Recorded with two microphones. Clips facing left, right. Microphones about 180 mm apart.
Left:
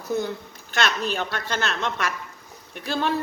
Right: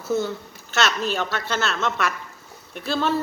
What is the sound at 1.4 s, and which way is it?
Speech, 15° left (ahead or behind).